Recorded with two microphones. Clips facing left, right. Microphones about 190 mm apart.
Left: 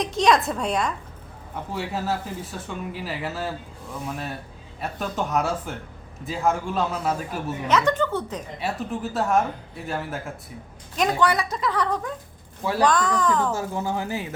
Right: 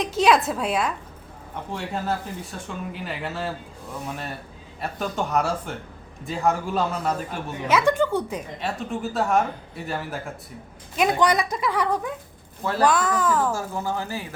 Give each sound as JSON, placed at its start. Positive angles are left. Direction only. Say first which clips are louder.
{"t": 0.0, "sound": "speech", "louder": "right 1 dB", "side_deg": -5}
{"t": 7.7, "sound": "a woman's voice", "louder": "right 2 dB", "side_deg": -10}
{"t": 8.5, "sound": "speech", "louder": "left 2 dB", "side_deg": 5}
{"t": 11.2, "sound": "a woman's voice", "louder": "right 1 dB", "side_deg": -15}
{"t": 13.5, "sound": "speech", "louder": "left 1 dB", "side_deg": 20}